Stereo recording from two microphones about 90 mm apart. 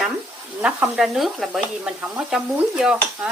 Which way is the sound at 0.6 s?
15° right (ahead or behind).